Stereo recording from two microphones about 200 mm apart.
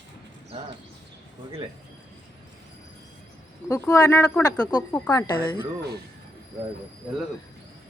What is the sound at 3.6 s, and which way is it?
Speech, 15° left (ahead or behind).